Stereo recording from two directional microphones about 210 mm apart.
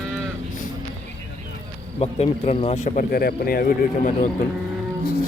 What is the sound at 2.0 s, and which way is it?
Speech, 30° left (ahead or behind).